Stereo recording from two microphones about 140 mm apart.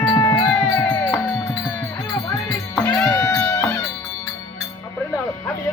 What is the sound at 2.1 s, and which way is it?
Music, 25° left (ahead or behind).